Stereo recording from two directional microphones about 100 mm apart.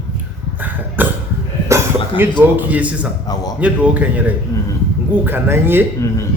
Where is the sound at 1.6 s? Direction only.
30° right (ahead or behind).